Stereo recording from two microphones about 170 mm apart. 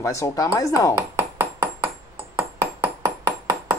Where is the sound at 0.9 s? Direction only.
15° right (ahead or behind).